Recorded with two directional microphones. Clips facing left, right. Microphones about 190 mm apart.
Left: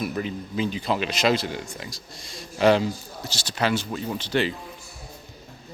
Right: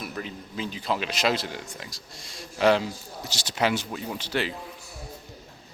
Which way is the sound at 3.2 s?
20° right (ahead or behind).